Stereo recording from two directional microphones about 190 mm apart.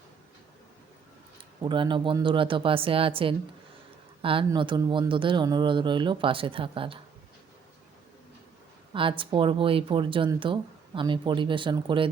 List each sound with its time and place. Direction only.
1.6 s speech: 25° right (ahead or behind)
8.9 s speech: 25° right (ahead or behind)